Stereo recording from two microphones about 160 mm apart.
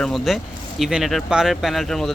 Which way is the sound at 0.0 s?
Centre (ahead or behind).